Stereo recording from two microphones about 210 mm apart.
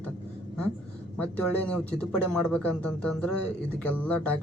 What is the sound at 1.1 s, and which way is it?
Speech, 5° left (ahead or behind).